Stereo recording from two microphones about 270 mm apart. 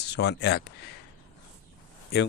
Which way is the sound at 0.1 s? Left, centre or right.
Left.